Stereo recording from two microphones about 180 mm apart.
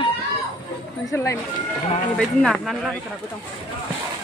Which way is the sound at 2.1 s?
5° left (ahead or behind).